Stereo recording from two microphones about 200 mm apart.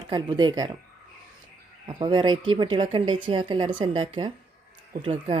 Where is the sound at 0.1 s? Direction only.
25° right (ahead or behind).